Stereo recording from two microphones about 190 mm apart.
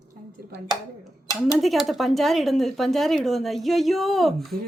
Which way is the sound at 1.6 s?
Centre (ahead or behind).